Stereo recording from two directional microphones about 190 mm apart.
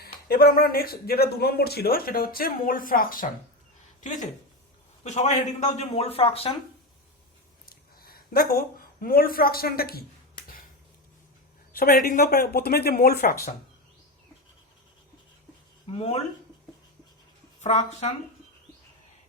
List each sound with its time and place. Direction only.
0.0 s speech: 50° left (ahead or behind); by 6.5 s 30° left (ahead or behind)
7.9 s a sound: 50° left (ahead or behind)
11.7 s speech: 50° left (ahead or behind)
15.9 s speech: 30° left (ahead or behind)
17.6 s speech: 35° left (ahead or behind)